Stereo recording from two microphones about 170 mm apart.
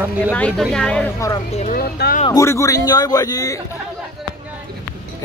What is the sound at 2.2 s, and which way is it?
A man's voice, 20° left (ahead or behind).